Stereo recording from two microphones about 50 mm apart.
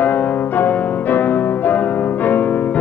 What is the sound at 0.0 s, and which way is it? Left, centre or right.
Music, left.